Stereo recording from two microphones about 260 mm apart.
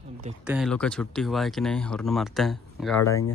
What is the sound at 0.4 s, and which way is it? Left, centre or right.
Speech, centre.